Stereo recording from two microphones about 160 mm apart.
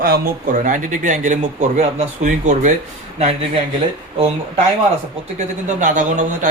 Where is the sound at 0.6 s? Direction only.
55° right (ahead or behind); by 3.6 s 40° right (ahead or behind).